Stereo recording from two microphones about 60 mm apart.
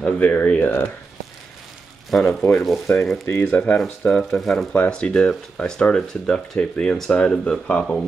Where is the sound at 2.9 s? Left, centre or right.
Left.